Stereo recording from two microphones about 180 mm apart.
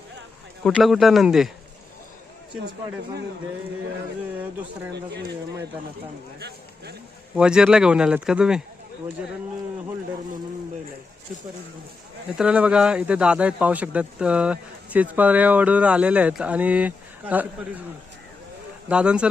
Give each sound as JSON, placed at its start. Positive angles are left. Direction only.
{"t": 0.6, "sound": "speech", "side_deg": 0}
{"t": 4.4, "sound": "a man's voice", "side_deg": -10}
{"t": 7.3, "sound": "speech", "side_deg": -5}
{"t": 12.4, "sound": "a man's voice", "side_deg": -5}
{"t": 18.9, "sound": "speech", "side_deg": -5}